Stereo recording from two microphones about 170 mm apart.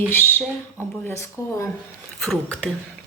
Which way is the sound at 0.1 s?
10° left (ahead or behind).